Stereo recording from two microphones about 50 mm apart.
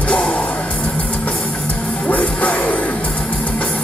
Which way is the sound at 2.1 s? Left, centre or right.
Left.